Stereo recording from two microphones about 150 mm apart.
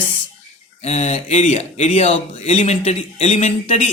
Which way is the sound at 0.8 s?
50° left (ahead or behind).